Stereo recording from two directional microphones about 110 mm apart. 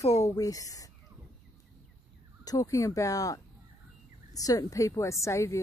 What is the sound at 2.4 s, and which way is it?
Speech, 30° left (ahead or behind).